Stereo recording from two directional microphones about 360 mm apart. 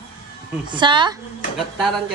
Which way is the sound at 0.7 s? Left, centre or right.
Centre.